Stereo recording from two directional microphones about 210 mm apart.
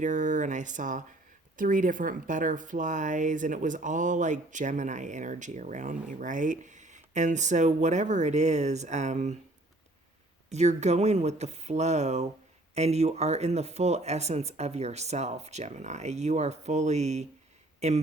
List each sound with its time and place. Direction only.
0.0 s speech: 35° right (ahead or behind)
10.5 s speech: 30° right (ahead or behind)